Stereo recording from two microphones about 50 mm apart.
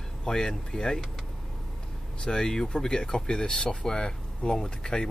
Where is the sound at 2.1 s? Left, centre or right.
Centre.